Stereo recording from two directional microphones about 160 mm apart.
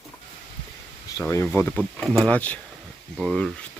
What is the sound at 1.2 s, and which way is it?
Speech, 15° left (ahead or behind).